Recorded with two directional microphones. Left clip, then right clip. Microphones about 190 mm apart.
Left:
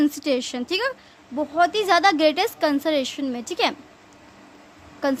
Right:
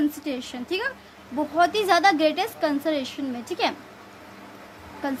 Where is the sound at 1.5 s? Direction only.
25° left (ahead or behind).